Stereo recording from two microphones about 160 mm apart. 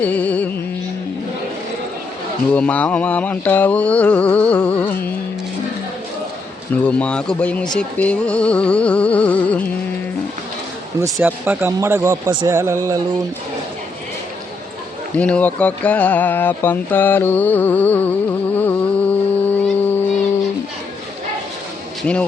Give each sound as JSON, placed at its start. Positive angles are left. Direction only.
{"t": 0.0, "sound": "mantra", "side_deg": 10}
{"t": 2.5, "sound": "mantra", "side_deg": 10}
{"t": 6.8, "sound": "mantra", "side_deg": 5}
{"t": 11.0, "sound": "speech", "side_deg": -10}
{"t": 15.1, "sound": "speech", "side_deg": 10}
{"t": 22.0, "sound": "speech", "side_deg": 5}